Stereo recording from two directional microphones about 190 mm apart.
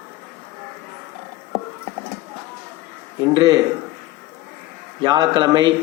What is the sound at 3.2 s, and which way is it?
Speech, 20° right (ahead or behind).